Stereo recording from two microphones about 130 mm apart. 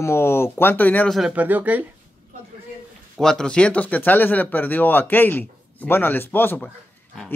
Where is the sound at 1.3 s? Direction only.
15° right (ahead or behind).